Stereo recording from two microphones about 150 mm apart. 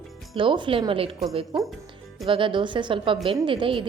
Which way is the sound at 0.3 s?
35° right (ahead or behind).